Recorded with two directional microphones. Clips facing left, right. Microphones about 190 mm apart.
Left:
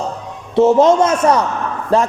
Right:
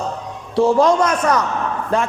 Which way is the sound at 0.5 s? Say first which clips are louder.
Left 4 dB; 20° left (ahead or behind).